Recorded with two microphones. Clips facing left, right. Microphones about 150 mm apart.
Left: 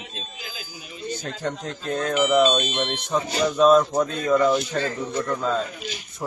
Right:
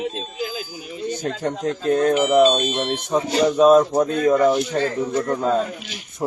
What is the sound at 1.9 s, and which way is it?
Speech, 45° right (ahead or behind).